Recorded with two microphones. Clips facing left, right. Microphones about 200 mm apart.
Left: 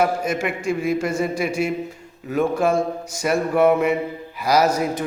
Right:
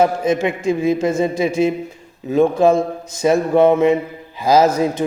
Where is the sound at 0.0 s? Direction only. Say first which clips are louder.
Right 5 dB; 20° right (ahead or behind).